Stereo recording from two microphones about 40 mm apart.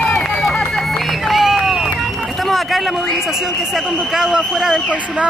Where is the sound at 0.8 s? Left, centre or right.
Centre.